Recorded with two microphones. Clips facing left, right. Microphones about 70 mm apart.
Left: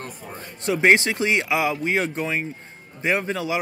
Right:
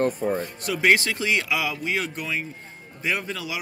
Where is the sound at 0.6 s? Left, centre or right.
Left.